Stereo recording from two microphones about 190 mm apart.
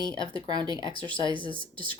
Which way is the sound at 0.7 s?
25° left (ahead or behind).